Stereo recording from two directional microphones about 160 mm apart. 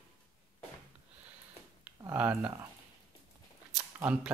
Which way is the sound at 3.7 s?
5° right (ahead or behind).